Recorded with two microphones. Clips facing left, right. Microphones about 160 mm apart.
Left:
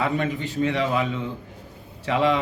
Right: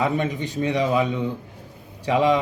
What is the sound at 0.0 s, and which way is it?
Speech, 20° right (ahead or behind).